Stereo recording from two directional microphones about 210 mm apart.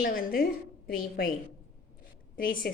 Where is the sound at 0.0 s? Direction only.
45° left (ahead or behind).